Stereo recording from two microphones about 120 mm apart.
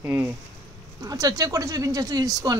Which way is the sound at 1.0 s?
30° right (ahead or behind).